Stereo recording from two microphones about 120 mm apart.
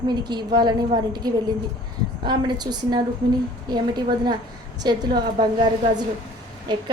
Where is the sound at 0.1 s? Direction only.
35° right (ahead or behind).